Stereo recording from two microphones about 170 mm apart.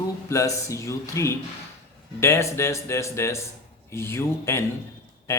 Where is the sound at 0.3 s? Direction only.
15° left (ahead or behind).